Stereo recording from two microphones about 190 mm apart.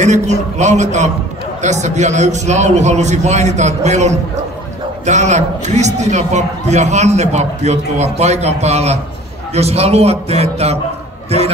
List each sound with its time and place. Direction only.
0.0 s a man's voice: 40° right (ahead or behind)